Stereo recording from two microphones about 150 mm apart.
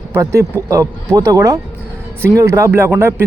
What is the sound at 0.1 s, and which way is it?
Speech, 20° right (ahead or behind).